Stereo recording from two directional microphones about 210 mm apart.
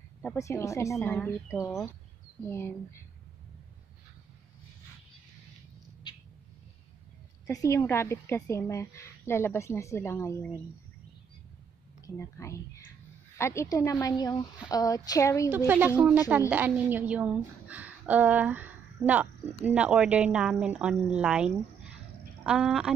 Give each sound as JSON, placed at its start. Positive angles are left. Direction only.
{"t": 0.2, "sound": "a woman's voice", "side_deg": 10}
{"t": 6.0, "sound": "a sound", "side_deg": 20}
{"t": 7.4, "sound": "a woman's voice", "side_deg": 15}
{"t": 12.0, "sound": "a woman's voice", "side_deg": 15}
{"t": 15.5, "sound": "a woman's voice", "side_deg": -10}
{"t": 22.4, "sound": "a sound", "side_deg": -5}